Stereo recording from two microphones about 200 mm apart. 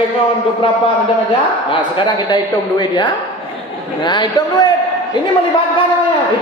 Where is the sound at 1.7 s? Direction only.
25° left (ahead or behind).